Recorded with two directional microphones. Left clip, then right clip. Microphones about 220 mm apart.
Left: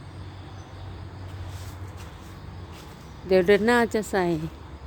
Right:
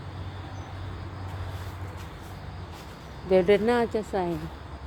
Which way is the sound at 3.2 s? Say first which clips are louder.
Left 2 dB; 20° left (ahead or behind).